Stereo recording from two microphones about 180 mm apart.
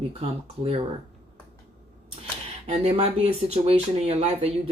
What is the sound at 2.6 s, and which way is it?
Speech, 35° right (ahead or behind).